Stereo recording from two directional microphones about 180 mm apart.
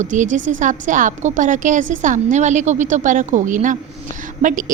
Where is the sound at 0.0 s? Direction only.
45° right (ahead or behind).